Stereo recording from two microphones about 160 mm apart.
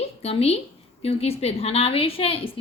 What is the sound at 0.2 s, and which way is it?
A woman's voice, 40° left (ahead or behind).